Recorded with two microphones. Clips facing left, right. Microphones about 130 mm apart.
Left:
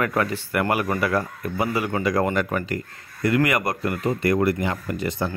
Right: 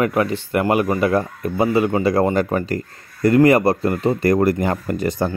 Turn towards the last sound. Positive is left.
turn(degrees=-45)  # may be behind; listen again after turning